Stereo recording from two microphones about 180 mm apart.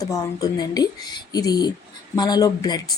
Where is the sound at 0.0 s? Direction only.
20° left (ahead or behind).